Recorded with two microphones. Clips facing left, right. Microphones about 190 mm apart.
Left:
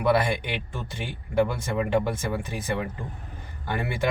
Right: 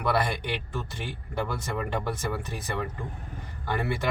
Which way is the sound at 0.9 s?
10° left (ahead or behind).